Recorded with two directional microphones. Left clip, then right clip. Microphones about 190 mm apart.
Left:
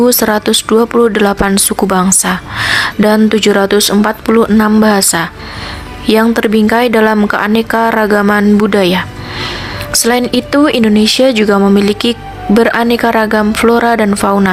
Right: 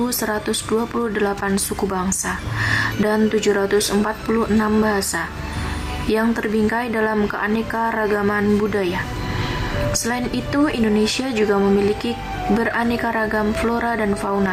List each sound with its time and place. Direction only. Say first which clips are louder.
0.0 s speech: left 13 dB; 40° left (ahead or behind)